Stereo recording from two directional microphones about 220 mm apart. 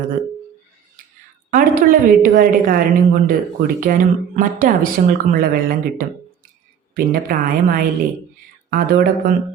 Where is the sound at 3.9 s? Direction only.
40° right (ahead or behind).